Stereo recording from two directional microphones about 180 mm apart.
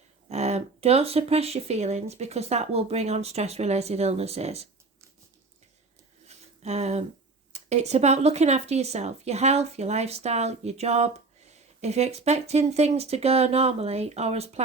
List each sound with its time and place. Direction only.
0.3 s speech: 35° right (ahead or behind)
6.2 s a sound: 40° right (ahead or behind)
7.5 s speech: 40° right (ahead or behind)